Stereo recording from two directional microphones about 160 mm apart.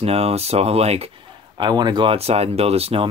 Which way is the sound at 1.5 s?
25° right (ahead or behind).